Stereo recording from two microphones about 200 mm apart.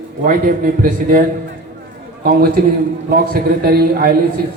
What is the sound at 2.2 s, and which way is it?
A man's voice, 45° right (ahead or behind).